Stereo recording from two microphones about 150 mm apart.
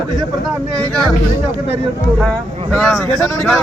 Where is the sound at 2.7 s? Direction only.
Centre (ahead or behind).